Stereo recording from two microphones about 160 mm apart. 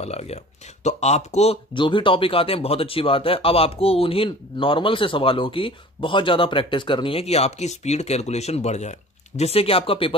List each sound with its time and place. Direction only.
0.0 s speech: 40° left (ahead or behind)